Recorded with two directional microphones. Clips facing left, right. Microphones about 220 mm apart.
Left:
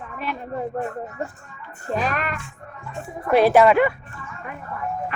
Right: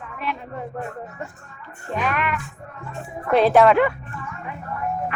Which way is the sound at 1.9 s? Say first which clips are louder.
Right 1 dB; 35° left (ahead or behind).